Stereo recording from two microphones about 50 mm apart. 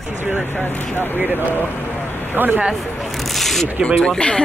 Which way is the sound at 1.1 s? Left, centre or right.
Right.